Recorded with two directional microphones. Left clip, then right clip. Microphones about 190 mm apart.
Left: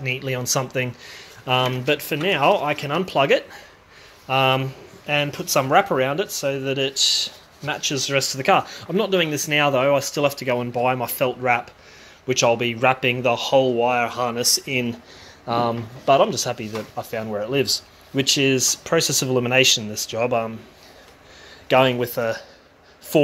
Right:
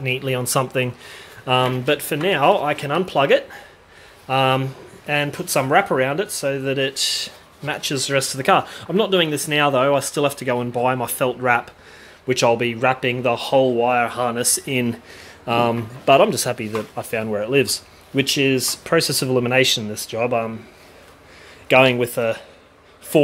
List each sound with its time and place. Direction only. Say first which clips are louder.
0.0 s speech: right 3 dB; 10° right (ahead or behind)
18.3 s speech: left 2 dB; centre (ahead or behind)
21.6 s speech: right 3 dB; 5° right (ahead or behind)